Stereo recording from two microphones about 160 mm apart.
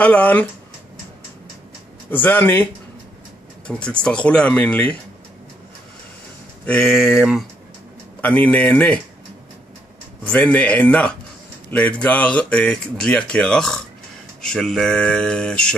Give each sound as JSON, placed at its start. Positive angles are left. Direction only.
{"t": 0.0, "sound": "speech", "side_deg": 10}
{"t": 2.0, "sound": "speech", "side_deg": 10}
{"t": 6.6, "sound": "speech", "side_deg": 5}
{"t": 8.2, "sound": "speech", "side_deg": 10}
{"t": 10.2, "sound": "speech", "side_deg": 10}